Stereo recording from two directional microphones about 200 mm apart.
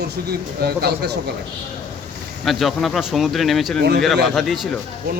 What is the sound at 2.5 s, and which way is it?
Speech, centre (ahead or behind).